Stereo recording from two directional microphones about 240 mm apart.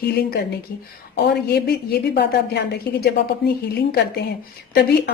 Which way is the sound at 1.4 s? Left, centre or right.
Left.